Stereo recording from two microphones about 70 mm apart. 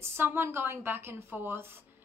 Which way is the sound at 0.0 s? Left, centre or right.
Right.